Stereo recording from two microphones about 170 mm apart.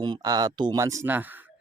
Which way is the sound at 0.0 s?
25° right (ahead or behind).